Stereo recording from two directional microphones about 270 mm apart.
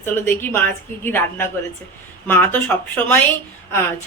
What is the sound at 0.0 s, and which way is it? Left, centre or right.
Speech, centre.